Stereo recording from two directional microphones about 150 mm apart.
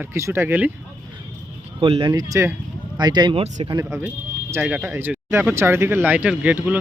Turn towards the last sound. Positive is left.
turn(degrees=-10)  # may be behind; listen again after turning